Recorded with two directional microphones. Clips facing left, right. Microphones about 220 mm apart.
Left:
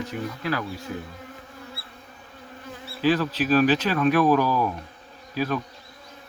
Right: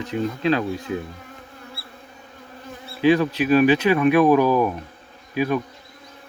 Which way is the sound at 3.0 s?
15° right (ahead or behind).